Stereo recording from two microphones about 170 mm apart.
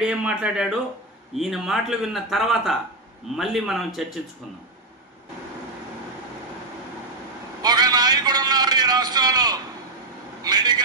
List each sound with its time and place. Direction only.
0.0 s a man's voice: 5° right (ahead or behind)
7.6 s a man's voice: 25° right (ahead or behind)